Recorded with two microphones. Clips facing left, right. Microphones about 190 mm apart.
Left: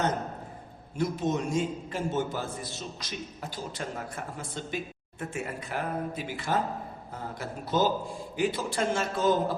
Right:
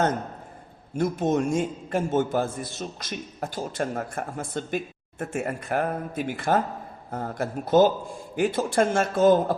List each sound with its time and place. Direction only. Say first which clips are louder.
0.9 s a man's voice: right 5 dB; 50° right (ahead or behind)